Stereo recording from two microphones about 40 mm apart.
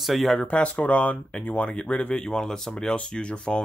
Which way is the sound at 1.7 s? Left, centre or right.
Left.